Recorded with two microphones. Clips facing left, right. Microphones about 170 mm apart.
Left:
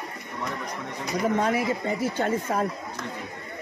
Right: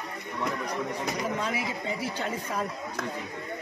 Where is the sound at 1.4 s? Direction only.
50° left (ahead or behind).